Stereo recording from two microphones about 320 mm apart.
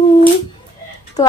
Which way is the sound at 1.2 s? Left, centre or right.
Centre.